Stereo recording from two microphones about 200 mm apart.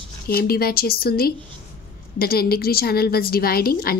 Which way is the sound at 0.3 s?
50° left (ahead or behind).